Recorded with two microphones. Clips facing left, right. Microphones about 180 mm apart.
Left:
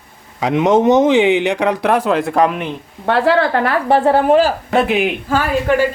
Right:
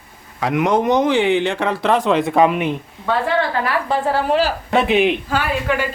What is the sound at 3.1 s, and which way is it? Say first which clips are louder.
A woman's voice: left 5 dB; 70° left (ahead or behind).